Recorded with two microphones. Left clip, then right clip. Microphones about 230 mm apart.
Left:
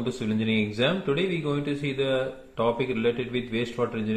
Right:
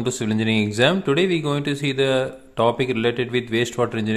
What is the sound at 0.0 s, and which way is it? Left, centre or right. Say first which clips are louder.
Speech: right 6 dB; right.